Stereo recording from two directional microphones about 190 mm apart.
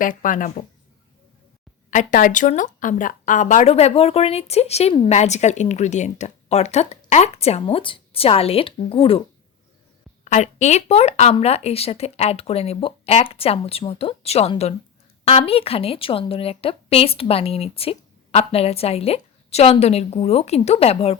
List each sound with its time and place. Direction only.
0.0 s speech: 45° left (ahead or behind)
1.9 s a woman's voice: 40° left (ahead or behind)
10.2 s a woman's voice: 40° left (ahead or behind)